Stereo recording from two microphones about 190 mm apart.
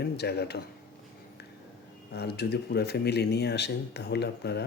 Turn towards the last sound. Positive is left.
turn(degrees=60)  # may be behind; listen again after turning